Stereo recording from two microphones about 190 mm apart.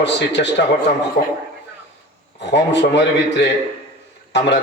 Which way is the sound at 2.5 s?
65° left (ahead or behind).